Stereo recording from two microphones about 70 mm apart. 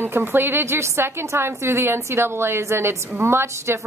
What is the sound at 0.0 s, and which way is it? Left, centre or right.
A woman's voice, right.